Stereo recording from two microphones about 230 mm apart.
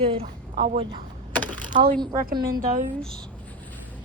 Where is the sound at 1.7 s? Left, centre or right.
Right.